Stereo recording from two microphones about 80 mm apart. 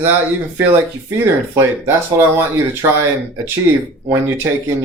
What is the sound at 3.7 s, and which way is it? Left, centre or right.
Speech, right.